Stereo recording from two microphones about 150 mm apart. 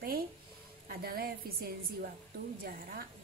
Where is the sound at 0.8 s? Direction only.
85° right.